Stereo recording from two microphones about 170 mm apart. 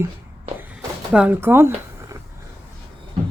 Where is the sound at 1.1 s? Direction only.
10° right (ahead or behind).